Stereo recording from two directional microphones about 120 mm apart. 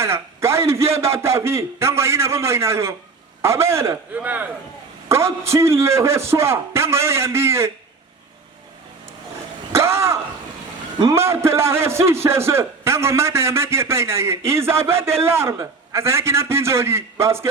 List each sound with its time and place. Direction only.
0.0 s a man's voice: 20° right (ahead or behind)
9.7 s a sound: 20° right (ahead or behind)
11.0 s a man's voice: 20° right (ahead or behind)